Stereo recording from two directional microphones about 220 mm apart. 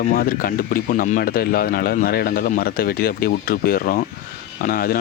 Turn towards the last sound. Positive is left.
turn(degrees=40)  # may be behind; listen again after turning